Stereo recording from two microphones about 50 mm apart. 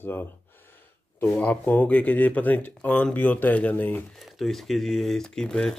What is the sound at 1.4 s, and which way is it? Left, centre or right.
Speech, left.